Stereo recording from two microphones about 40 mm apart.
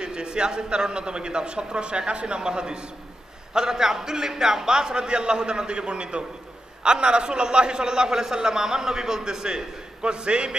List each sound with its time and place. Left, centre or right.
0.0 s a man's voice: right